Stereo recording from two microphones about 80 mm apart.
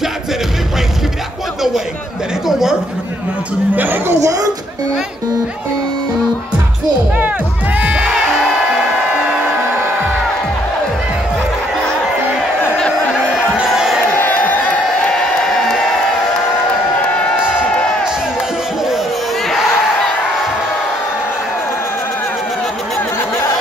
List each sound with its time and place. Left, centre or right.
2.4 s a sound: centre
3.7 s speech: right
4.2 s speech: right
7.2 s music: centre
12.7 s a sound: centre
13.7 s crowd: centre
14.1 s crowd: left
15.0 s crowd: centre